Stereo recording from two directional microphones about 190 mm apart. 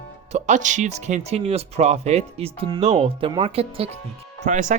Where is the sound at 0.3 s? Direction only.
40° right (ahead or behind).